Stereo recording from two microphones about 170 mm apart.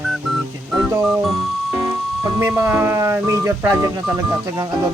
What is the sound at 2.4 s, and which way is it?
Speech, 15° right (ahead or behind).